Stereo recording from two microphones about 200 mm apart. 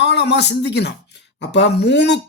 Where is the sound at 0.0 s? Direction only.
60° left (ahead or behind).